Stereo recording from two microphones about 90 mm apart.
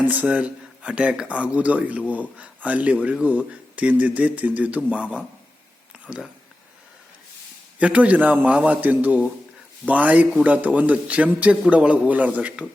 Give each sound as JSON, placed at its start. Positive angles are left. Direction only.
{"t": 0.0, "sound": "speech", "side_deg": -15}
{"t": 7.8, "sound": "speech", "side_deg": -15}